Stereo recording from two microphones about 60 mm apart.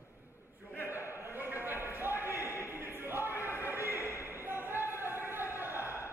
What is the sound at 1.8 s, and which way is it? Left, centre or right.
Basketball bounce, right.